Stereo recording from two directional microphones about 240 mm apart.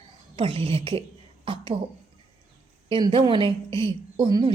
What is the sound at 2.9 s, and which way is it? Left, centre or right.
A woman's voice, right.